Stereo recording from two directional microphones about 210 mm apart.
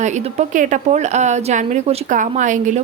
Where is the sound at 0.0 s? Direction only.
35° right (ahead or behind).